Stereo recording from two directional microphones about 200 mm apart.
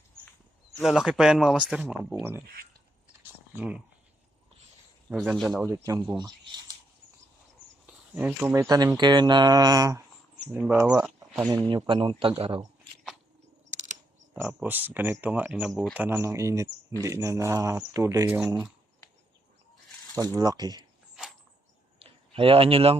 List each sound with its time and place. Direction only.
0.8 s speech: centre (ahead or behind)
3.5 s speech: 5° right (ahead or behind)
5.0 s speech: 5° right (ahead or behind); by 6.5 s 20° right (ahead or behind)
7.9 s speech: 10° right (ahead or behind)
10.5 s speech: 5° right (ahead or behind)
10.8 s speech: 15° right (ahead or behind)
11.9 s speech: 25° right (ahead or behind)
14.3 s speech: 10° right (ahead or behind)
18.4 s speech: 5° right (ahead or behind)
20.1 s speech: 20° right (ahead or behind)
21.9 s a sound: 30° right (ahead or behind)